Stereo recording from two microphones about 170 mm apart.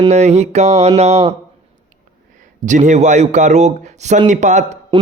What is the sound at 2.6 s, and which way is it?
A man's voice, 45° right (ahead or behind).